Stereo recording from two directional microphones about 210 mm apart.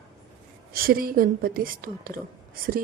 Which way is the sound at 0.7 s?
45° right (ahead or behind).